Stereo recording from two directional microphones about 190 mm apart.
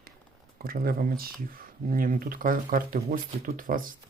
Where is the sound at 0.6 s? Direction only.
50° right (ahead or behind).